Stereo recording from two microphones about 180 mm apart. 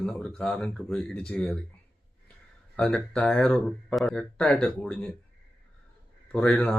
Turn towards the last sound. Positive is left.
turn(degrees=5)  # may be behind; listen again after turning